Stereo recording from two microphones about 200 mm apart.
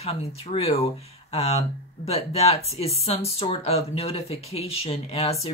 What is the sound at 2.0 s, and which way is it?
Speech, 30° left (ahead or behind).